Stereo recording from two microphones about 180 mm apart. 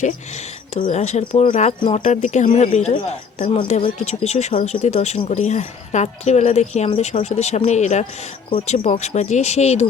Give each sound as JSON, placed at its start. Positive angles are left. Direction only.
{"t": 0.7, "sound": "a woman's voice", "side_deg": 40}